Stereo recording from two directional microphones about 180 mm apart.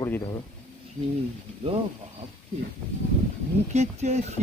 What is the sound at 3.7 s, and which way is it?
Speech, 40° right (ahead or behind).